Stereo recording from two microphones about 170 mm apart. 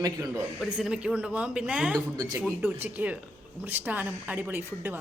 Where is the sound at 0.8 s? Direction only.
5° right (ahead or behind).